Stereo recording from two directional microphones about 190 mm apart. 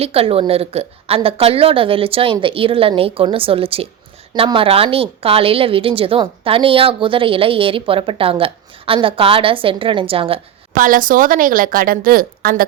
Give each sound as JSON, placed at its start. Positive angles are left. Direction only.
{"t": 0.0, "sound": "speech", "side_deg": -30}
{"t": 10.8, "sound": "a woman's voice", "side_deg": -45}